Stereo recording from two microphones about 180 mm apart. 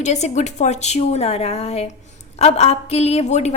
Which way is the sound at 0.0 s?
40° left (ahead or behind).